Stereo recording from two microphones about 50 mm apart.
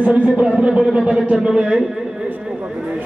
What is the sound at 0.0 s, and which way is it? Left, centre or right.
A man's voice, right.